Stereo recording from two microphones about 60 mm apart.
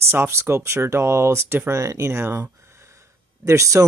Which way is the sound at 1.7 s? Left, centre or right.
Right.